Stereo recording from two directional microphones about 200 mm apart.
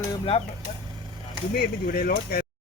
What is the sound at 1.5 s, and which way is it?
Speech, 50° left (ahead or behind).